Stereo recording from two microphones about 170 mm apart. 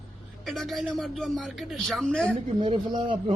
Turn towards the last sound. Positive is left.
turn(degrees=-30)  # may be behind; listen again after turning